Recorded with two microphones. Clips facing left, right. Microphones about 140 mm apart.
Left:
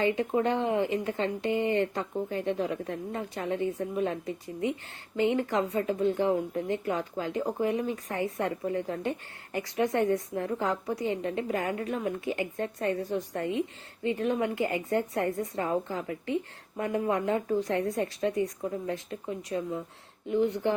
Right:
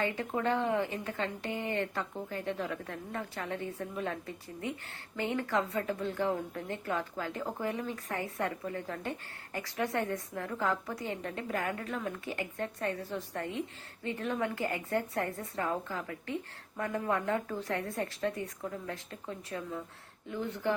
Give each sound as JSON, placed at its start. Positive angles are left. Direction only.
{"t": 0.0, "sound": "speech", "side_deg": 20}